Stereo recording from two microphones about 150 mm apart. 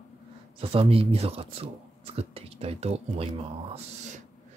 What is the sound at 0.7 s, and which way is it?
Speech, 40° right (ahead or behind).